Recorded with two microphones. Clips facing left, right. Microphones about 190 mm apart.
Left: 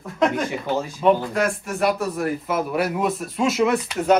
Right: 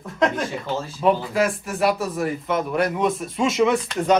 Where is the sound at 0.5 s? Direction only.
15° left (ahead or behind).